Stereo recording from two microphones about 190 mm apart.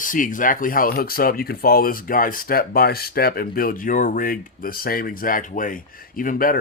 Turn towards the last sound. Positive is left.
turn(degrees=45)  # may be behind; listen again after turning